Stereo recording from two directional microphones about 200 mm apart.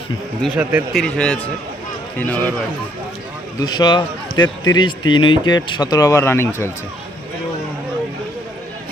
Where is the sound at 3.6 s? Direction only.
20° left (ahead or behind).